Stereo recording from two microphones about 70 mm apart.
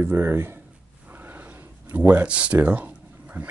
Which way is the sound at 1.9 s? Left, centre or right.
Right.